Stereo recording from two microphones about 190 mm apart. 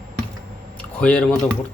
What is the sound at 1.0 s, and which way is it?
Speech, 5° left (ahead or behind).